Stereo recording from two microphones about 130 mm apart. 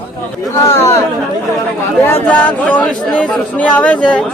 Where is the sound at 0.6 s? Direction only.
25° left (ahead or behind).